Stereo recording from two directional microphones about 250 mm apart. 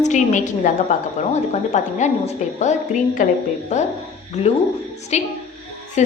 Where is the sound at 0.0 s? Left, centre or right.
Left.